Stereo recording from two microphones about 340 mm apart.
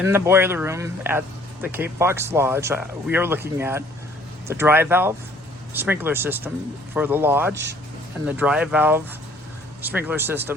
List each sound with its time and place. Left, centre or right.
0.0 s speech: centre
7.5 s speech: right
8.3 s speech: centre